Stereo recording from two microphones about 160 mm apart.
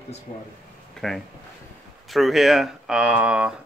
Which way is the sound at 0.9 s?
Centre (ahead or behind).